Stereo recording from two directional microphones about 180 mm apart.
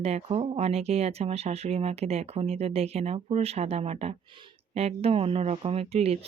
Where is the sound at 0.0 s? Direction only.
35° right (ahead or behind).